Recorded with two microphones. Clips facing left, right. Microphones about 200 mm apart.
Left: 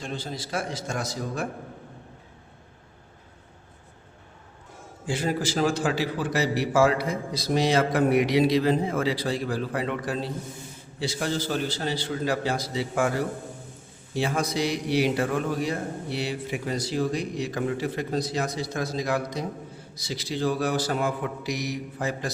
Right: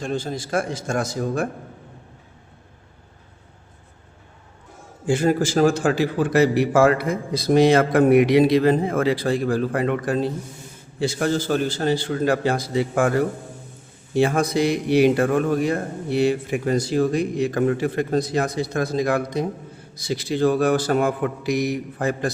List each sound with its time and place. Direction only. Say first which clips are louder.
0.0 s a man's voice: right 7 dB; 50° right (ahead or behind)
5.0 s a man's voice: right 8 dB; 50° right (ahead or behind)